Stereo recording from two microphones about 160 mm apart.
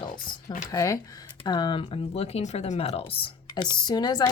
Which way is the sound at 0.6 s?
20° left (ahead or behind).